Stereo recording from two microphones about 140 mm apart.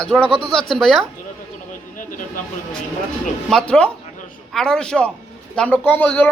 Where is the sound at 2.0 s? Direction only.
70° left (ahead or behind).